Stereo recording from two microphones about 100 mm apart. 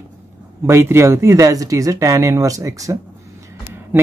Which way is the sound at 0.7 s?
25° right (ahead or behind).